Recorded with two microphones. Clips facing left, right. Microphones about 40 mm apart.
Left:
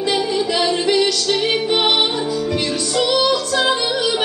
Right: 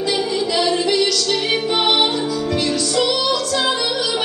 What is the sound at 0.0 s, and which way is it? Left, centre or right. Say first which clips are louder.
Music: left 1 dB; left.